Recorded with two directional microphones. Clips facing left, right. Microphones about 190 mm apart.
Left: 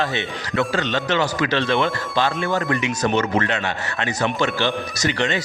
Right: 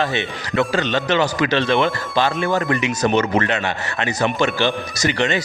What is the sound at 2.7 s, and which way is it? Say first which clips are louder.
Speech: right 2 dB; 5° right (ahead or behind).